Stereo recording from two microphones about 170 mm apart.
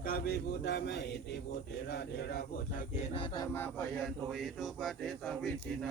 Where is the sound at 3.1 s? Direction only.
30° left (ahead or behind).